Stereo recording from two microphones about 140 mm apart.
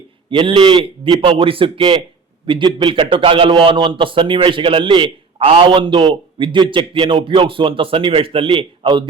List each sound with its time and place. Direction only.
0.3 s a man's voice: 40° right (ahead or behind)